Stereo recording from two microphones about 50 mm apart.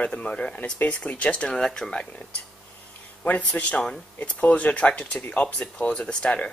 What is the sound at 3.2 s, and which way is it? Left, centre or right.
Speech, left.